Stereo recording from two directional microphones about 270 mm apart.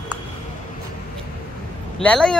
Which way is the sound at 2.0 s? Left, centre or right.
Centre.